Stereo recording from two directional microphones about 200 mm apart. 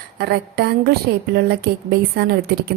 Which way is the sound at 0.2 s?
55° right (ahead or behind).